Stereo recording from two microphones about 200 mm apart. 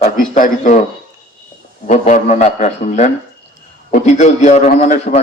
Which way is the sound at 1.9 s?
35° left (ahead or behind).